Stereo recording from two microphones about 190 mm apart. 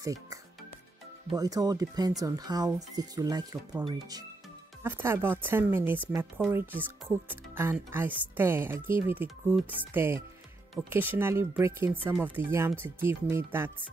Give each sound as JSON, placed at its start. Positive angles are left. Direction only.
{"t": 0.0, "sound": "music", "side_deg": -15}
{"t": 1.3, "sound": "speech", "side_deg": -20}